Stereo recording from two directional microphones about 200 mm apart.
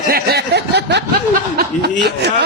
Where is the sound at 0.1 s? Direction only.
55° right (ahead or behind).